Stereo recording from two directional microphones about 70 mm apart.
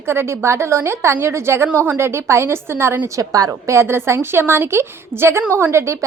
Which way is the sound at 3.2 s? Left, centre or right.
Right.